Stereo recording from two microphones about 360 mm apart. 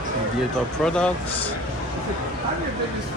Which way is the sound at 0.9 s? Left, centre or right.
Centre.